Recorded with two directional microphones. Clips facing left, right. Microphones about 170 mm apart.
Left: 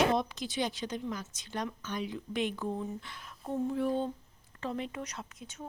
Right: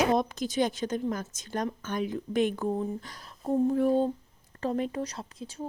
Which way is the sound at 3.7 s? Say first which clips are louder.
Right 7 dB; 40° right (ahead or behind).